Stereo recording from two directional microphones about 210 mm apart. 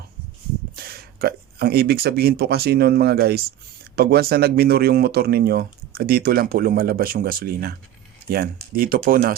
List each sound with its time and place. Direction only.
0.8 s speech: 45° right (ahead or behind)